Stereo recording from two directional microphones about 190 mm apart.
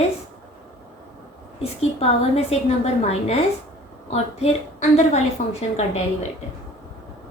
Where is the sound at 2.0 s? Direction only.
35° left (ahead or behind).